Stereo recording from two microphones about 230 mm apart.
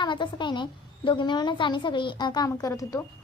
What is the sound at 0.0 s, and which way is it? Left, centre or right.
A woman's voice, centre.